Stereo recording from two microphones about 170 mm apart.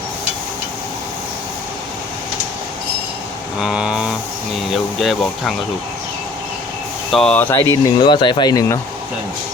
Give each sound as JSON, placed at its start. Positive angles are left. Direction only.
{"t": 3.6, "sound": "a sound", "side_deg": -5}
{"t": 4.7, "sound": "speech", "side_deg": 0}
{"t": 7.1, "sound": "speech", "side_deg": 5}
{"t": 7.7, "sound": "speech", "side_deg": 20}